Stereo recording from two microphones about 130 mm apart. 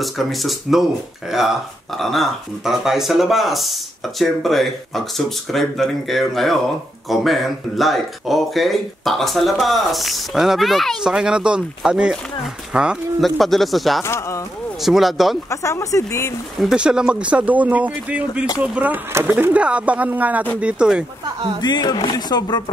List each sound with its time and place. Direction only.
0.0 s speech: centre (ahead or behind)
14.0 s speech: 20° left (ahead or behind)
14.8 s speech: centre (ahead or behind)
15.5 s speech: 20° left (ahead or behind)
16.6 s speech: 5° right (ahead or behind)
21.5 s speech: 35° left (ahead or behind)